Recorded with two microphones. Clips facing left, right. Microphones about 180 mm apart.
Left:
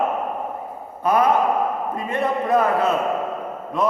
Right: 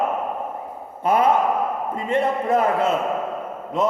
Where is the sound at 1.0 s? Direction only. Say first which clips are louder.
Even; 25° right (ahead or behind).